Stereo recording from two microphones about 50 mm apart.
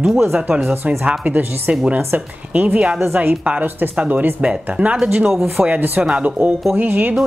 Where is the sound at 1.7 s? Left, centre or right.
Right.